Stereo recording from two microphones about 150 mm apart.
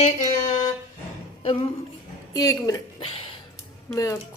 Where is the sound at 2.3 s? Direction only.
20° left (ahead or behind).